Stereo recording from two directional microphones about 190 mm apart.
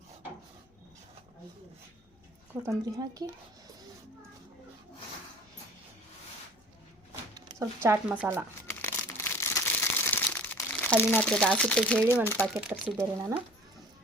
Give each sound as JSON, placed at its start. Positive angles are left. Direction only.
{"t": 2.5, "sound": "speech", "side_deg": -15}
{"t": 7.6, "sound": "speech", "side_deg": -15}
{"t": 8.8, "sound": "crumpling", "side_deg": 15}
{"t": 12.2, "sound": "speech", "side_deg": 10}
{"t": 12.5, "sound": "speech", "side_deg": -5}